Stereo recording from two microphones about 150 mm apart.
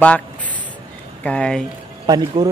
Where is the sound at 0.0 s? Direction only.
10° left (ahead or behind).